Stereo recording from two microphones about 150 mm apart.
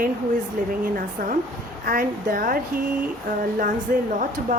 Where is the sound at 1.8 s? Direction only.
70° right (ahead or behind).